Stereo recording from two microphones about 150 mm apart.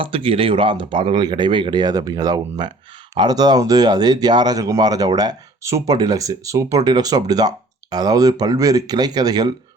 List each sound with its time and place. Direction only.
0.0 s speech: 35° right (ahead or behind)